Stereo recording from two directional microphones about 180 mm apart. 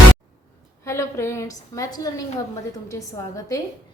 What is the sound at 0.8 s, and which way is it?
A woman's voice, 15° left (ahead or behind).